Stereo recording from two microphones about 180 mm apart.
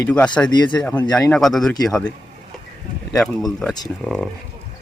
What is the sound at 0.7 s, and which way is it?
A man's voice, 5° left (ahead or behind).